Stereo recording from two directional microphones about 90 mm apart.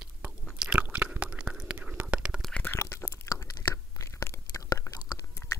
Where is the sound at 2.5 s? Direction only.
25° left (ahead or behind).